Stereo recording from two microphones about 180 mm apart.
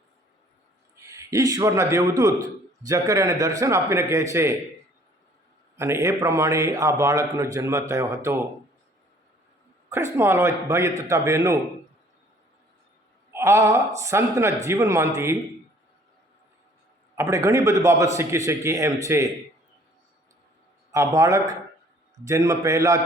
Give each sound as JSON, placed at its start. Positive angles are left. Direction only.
{"t": 0.9, "sound": "a man's voice", "side_deg": -15}
{"t": 5.7, "sound": "a man's voice", "side_deg": -15}
{"t": 9.9, "sound": "a man's voice", "side_deg": -15}
{"t": 13.3, "sound": "a man's voice", "side_deg": -15}
{"t": 17.2, "sound": "a man's voice", "side_deg": -15}
{"t": 20.9, "sound": "a man's voice", "side_deg": -15}